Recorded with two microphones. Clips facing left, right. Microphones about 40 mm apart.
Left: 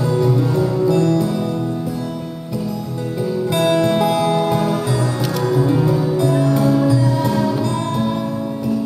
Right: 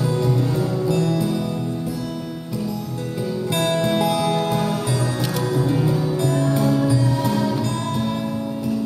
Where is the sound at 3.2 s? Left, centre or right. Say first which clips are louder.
Left 5 dB; centre.